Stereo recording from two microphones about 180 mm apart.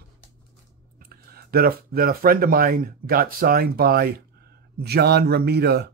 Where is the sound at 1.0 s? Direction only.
55° right (ahead or behind).